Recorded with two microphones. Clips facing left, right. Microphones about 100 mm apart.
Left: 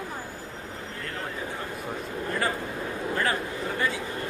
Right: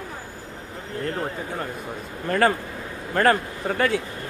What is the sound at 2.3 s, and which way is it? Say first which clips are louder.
A man's voice: right 9 dB; 65° right (ahead or behind).